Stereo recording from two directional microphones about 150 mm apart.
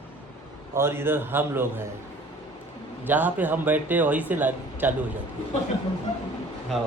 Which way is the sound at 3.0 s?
10° right (ahead or behind).